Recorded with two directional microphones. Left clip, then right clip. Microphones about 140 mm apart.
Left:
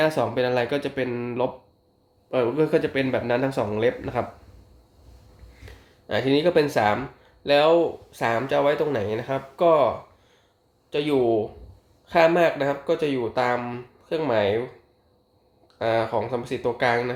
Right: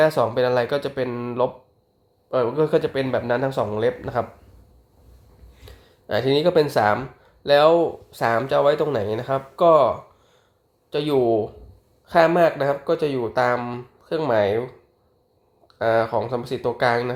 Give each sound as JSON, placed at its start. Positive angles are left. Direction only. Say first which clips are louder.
{"t": 0.0, "sound": "speech", "louder": "right 4 dB", "side_deg": -25}
{"t": 6.1, "sound": "speech", "louder": "right 2 dB", "side_deg": -30}
{"t": 10.9, "sound": "speech", "louder": "right 2 dB", "side_deg": -30}
{"t": 15.6, "sound": "speech", "louder": "right 3 dB", "side_deg": -30}